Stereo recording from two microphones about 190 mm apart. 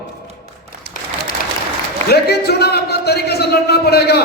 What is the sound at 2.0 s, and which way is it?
A man's voice, 55° left (ahead or behind).